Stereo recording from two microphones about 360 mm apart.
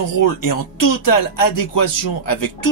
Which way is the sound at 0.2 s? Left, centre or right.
Left.